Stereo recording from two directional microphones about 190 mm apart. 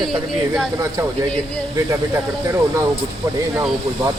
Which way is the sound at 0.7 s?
15° right (ahead or behind).